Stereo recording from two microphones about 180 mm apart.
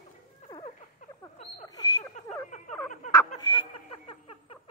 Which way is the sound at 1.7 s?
20° left (ahead or behind).